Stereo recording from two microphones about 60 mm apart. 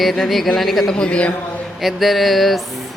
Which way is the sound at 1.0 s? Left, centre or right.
Centre.